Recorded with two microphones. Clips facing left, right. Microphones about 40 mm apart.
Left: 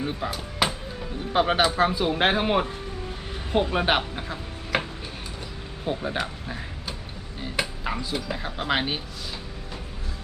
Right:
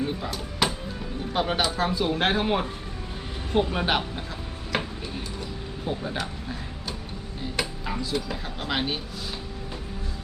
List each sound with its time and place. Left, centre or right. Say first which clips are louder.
0.0 s speech: even; centre